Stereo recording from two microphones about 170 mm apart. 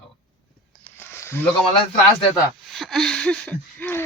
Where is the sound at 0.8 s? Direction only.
15° left (ahead or behind).